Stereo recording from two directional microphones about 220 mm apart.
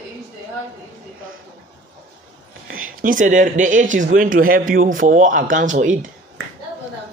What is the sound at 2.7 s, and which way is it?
Speech, 40° right (ahead or behind).